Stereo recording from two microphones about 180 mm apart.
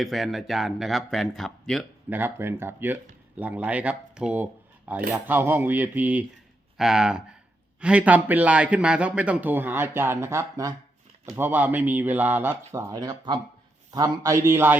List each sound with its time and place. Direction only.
0.0 s speech: centre (ahead or behind)
2.0 s a man's voice: 10° right (ahead or behind)